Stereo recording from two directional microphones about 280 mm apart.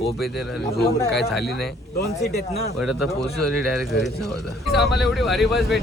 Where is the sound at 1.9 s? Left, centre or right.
Left.